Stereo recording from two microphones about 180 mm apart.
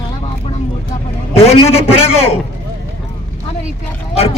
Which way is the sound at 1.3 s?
35° left (ahead or behind).